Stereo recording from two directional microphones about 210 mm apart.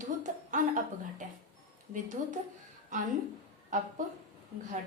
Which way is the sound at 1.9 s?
40° right (ahead or behind).